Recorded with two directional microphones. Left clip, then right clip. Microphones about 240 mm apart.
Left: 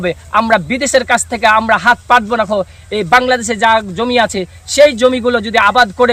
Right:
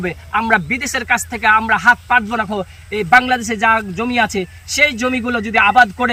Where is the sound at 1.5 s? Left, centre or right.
Left.